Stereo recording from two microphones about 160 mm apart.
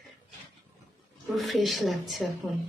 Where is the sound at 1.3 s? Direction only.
Centre (ahead or behind).